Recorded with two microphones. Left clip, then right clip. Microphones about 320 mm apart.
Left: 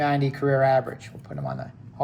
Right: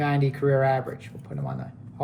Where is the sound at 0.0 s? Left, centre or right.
Centre.